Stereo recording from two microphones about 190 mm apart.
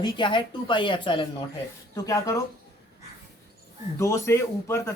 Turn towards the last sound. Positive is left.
turn(degrees=15)  # may be behind; listen again after turning